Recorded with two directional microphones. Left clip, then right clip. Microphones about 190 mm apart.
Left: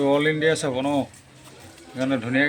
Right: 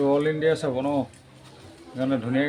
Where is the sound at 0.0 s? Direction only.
5° left (ahead or behind).